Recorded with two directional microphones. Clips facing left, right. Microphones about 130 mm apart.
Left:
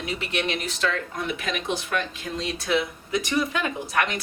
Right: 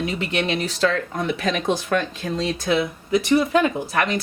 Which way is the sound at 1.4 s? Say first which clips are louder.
Right 6 dB; 35° right (ahead or behind).